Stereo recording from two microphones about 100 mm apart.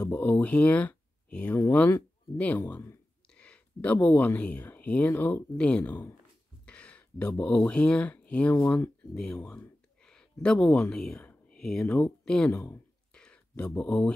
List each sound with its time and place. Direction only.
0.0 s speech: 15° left (ahead or behind)
2.6 s speech: 25° left (ahead or behind)
3.3 s speech: 10° left (ahead or behind)
9.1 s a sound: 10° left (ahead or behind)
10.4 s speech: 10° left (ahead or behind)
12.3 s a sound: 10° left (ahead or behind)